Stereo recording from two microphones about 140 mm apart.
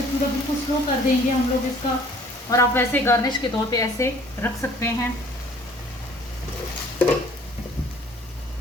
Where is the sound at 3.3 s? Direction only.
30° left (ahead or behind).